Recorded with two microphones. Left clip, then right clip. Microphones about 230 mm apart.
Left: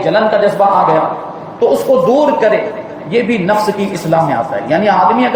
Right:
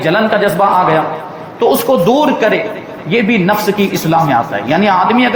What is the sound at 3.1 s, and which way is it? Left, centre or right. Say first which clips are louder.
A man's voice: even; right.